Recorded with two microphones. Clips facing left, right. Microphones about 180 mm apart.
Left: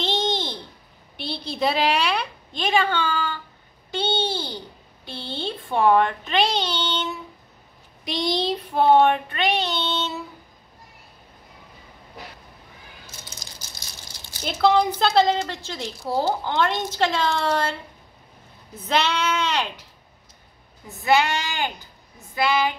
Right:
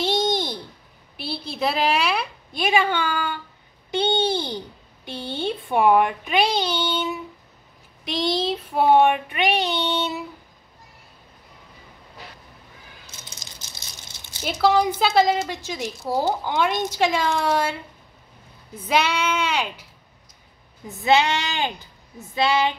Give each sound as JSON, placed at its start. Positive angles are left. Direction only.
{"t": 0.0, "sound": "a sound", "side_deg": -10}
{"t": 1.1, "sound": "a woman's voice", "side_deg": -5}
{"t": 8.0, "sound": "a woman's voice", "side_deg": 0}
{"t": 14.4, "sound": "a woman's voice", "side_deg": -5}
{"t": 18.8, "sound": "a woman's voice", "side_deg": -10}
{"t": 21.0, "sound": "speech", "side_deg": -20}